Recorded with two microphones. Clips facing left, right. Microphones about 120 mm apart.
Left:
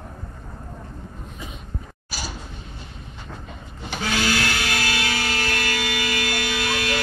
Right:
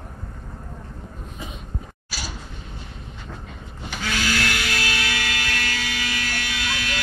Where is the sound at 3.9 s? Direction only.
30° left (ahead or behind).